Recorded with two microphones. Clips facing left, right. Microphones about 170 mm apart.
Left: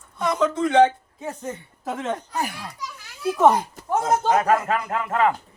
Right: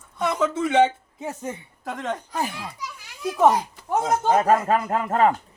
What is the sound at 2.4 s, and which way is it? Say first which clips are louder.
Speech: even; 20° right (ahead or behind).